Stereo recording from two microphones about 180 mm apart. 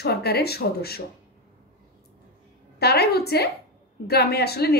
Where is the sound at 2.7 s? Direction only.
65° left (ahead or behind).